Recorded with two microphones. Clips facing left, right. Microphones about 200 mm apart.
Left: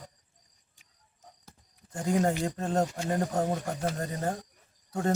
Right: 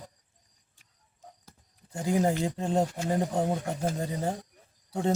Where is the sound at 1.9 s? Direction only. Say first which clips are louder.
Right 1 dB; 5° right (ahead or behind).